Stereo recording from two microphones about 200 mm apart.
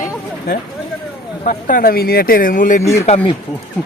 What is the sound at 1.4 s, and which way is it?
A man's voice, 40° left (ahead or behind).